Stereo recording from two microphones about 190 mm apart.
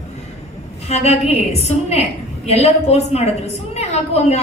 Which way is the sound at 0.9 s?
35° left (ahead or behind).